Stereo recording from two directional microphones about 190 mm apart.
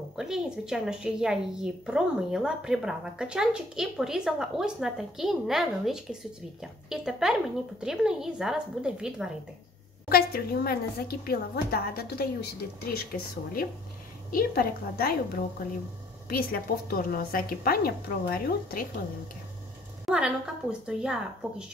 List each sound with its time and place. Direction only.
0.1 s a woman's voice: 5° right (ahead or behind)
10.0 s a woman's voice: 55° left (ahead or behind)
16.3 s a woman's voice: 50° left (ahead or behind)
20.1 s a woman's voice: 5° right (ahead or behind)